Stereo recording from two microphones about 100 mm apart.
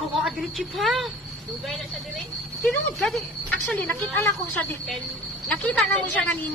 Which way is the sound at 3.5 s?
15° left (ahead or behind).